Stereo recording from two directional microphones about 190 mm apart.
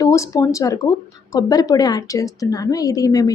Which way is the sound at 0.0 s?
15° left (ahead or behind).